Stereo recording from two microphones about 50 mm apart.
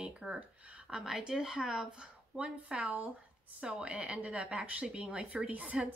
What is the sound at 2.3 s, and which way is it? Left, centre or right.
A woman's voice, right.